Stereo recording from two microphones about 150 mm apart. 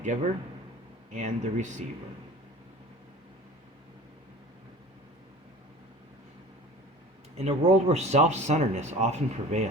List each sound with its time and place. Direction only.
0.0 s a man's voice: 50° right (ahead or behind)
7.3 s speech: 45° right (ahead or behind)